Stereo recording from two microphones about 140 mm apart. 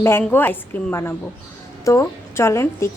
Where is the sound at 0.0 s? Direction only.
15° left (ahead or behind).